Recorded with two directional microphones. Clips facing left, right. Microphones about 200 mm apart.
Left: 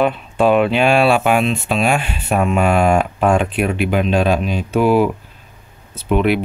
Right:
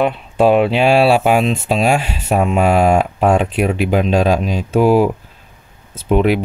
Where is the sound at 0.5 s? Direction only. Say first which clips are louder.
Right 1 dB; 30° right (ahead or behind).